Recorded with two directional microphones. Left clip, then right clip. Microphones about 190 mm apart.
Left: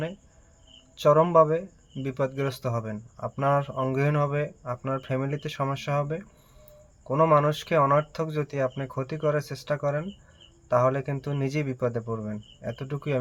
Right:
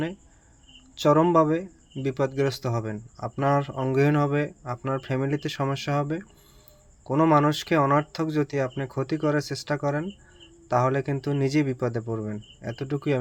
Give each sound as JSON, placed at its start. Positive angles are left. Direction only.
{"t": 0.9, "sound": "speech", "side_deg": -15}